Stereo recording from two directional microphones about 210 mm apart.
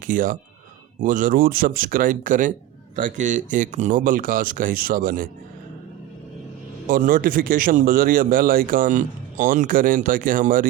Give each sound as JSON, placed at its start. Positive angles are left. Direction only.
{"t": 0.1, "sound": "speech", "side_deg": -40}
{"t": 6.8, "sound": "speech", "side_deg": -40}